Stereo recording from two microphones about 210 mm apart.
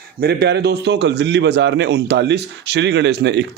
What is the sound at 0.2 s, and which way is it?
A man's voice, 50° right (ahead or behind).